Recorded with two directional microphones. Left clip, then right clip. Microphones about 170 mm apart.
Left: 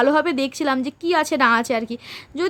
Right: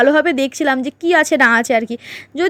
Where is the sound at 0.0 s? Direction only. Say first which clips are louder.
Right 5 dB; 20° right (ahead or behind).